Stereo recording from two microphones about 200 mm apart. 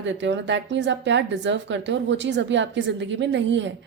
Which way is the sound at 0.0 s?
65° right (ahead or behind).